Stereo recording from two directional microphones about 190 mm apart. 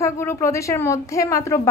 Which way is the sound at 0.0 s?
15° left (ahead or behind).